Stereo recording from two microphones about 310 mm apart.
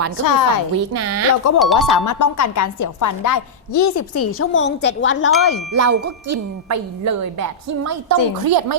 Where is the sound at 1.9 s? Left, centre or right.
Left.